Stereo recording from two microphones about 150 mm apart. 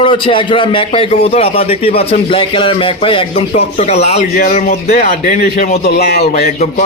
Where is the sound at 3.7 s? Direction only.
50° left (ahead or behind).